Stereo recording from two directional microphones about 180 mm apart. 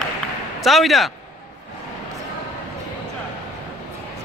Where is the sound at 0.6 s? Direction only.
Centre (ahead or behind).